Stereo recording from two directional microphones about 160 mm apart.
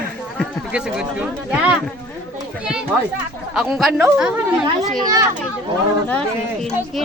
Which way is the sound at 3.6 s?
5° right (ahead or behind).